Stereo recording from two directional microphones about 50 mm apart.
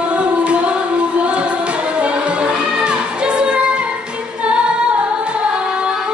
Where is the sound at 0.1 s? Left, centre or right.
Right.